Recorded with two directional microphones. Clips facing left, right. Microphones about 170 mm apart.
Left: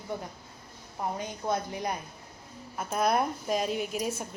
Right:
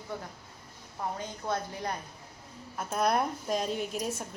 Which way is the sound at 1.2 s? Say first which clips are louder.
Left 3 dB; 15° left (ahead or behind).